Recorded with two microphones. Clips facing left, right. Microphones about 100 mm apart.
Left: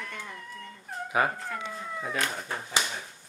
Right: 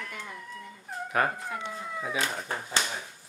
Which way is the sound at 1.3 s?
15° right (ahead or behind).